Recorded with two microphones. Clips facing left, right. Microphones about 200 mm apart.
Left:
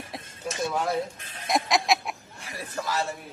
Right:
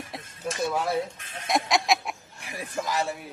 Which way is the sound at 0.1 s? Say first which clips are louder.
Even; centre (ahead or behind).